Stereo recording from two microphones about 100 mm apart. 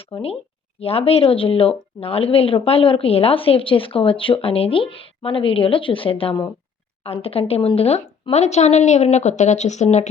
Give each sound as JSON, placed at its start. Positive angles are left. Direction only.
{"t": 0.1, "sound": "speech", "side_deg": 70}
{"t": 7.0, "sound": "speech", "side_deg": 75}
{"t": 7.8, "sound": "speech", "side_deg": 90}
{"t": 9.6, "sound": "speech", "side_deg": 70}